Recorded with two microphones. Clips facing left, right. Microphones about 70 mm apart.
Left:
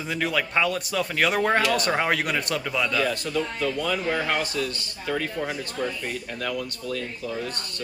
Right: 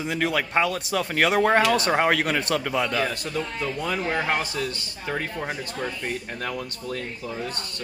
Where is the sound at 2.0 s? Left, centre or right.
Right.